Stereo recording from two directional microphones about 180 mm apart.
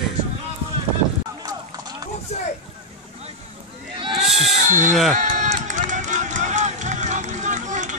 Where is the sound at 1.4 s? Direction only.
20° right (ahead or behind).